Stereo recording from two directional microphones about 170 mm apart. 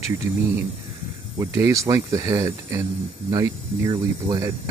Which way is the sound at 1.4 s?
20° right (ahead or behind).